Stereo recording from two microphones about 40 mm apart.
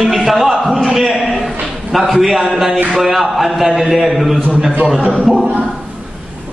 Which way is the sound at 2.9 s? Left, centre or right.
Centre.